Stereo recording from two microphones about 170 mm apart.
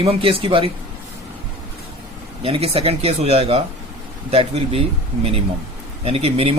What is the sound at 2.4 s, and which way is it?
Speech, 35° right (ahead or behind).